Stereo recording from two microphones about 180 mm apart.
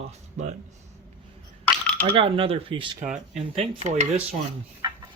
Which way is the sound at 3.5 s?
35° right (ahead or behind).